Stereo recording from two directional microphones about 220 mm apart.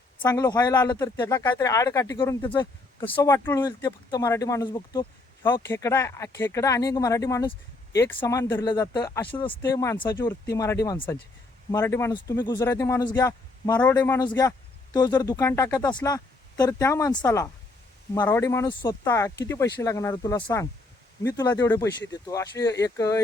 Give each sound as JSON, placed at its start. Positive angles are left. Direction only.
{"t": 0.2, "sound": "speech", "side_deg": 15}
{"t": 9.5, "sound": "speech", "side_deg": 10}